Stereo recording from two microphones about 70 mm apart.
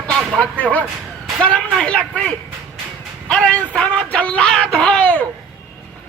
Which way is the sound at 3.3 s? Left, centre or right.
Centre.